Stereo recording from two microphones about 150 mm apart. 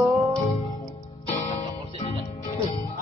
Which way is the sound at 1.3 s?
45° left (ahead or behind).